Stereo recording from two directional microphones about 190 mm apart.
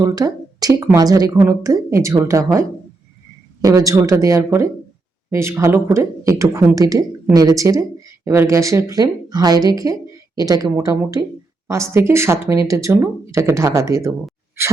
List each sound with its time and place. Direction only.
0.0 s speech: 20° right (ahead or behind)